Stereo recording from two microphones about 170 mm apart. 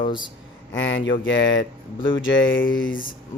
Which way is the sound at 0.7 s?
90° left.